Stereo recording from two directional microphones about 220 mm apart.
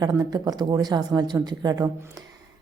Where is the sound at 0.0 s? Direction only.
15° right (ahead or behind).